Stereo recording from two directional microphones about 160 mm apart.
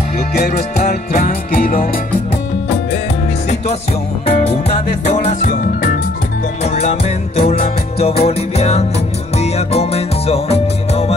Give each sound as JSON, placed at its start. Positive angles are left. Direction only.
{"t": 0.5, "sound": "music", "side_deg": 55}
{"t": 4.4, "sound": "music", "side_deg": 40}